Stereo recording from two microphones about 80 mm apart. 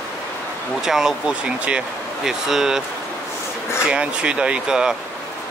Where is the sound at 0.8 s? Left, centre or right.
Centre.